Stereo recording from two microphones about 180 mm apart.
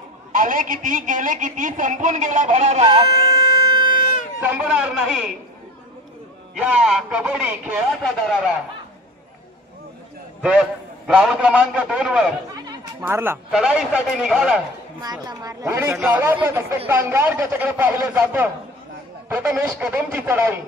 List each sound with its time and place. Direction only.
0.3 s a man's voice: 45° right (ahead or behind)
3.7 s vehicle: 50° left (ahead or behind)
4.4 s a man's voice: 10° right (ahead or behind)
6.5 s a man's voice: 5° right (ahead or behind)
10.4 s a man's voice: 5° right (ahead or behind)
15.0 s a woman's voice: 20° right (ahead or behind)